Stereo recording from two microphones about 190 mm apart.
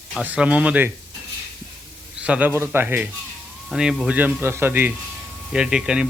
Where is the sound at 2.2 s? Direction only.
5° right (ahead or behind).